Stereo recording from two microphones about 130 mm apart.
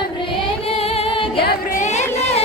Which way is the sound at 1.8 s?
60° left (ahead or behind).